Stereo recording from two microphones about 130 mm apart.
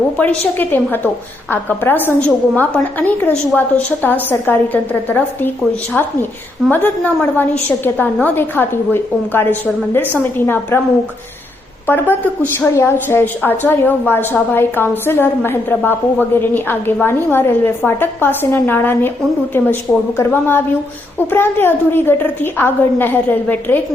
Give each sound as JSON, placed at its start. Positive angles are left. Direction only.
{"t": 0.2, "sound": "a woman's voice", "side_deg": 15}
{"t": 11.9, "sound": "a woman's voice", "side_deg": 15}
{"t": 20.1, "sound": "a woman's voice", "side_deg": 15}